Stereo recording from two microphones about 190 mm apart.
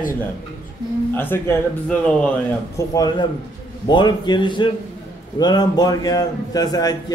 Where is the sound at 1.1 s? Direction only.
10° left (ahead or behind).